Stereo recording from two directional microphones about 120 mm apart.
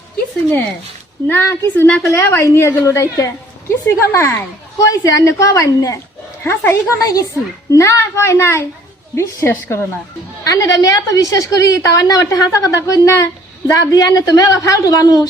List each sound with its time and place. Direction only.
1.3 s a woman's voice: 15° left (ahead or behind)